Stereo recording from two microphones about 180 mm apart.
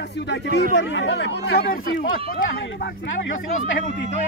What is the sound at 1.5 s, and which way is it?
Speech, 60° left (ahead or behind).